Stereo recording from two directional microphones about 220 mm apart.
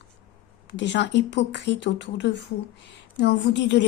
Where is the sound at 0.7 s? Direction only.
55° left (ahead or behind).